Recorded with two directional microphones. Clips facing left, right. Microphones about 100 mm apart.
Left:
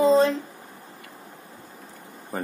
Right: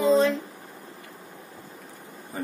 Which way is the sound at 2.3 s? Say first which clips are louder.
Left 2 dB; 50° left (ahead or behind).